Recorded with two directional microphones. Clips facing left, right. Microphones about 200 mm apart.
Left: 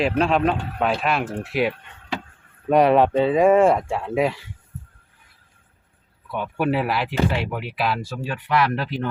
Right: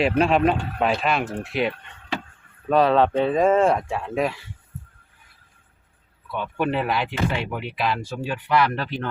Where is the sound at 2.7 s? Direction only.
15° left (ahead or behind).